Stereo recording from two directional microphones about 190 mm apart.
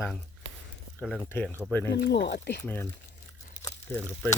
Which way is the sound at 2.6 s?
10° left (ahead or behind).